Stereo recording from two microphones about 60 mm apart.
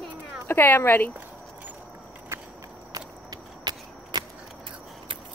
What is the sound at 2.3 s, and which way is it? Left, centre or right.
Walk, right.